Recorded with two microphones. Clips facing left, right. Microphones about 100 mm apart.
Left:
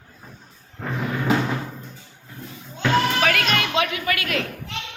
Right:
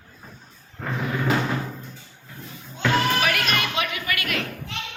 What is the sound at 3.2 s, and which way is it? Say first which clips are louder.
Music: left 2 dB; 90° left.